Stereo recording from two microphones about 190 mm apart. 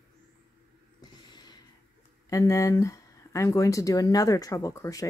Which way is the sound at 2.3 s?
15° left (ahead or behind).